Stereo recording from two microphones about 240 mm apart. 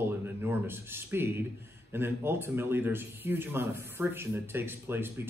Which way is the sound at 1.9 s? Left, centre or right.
Centre.